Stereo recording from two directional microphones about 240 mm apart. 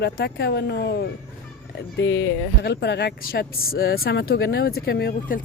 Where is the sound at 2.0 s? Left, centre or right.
Left.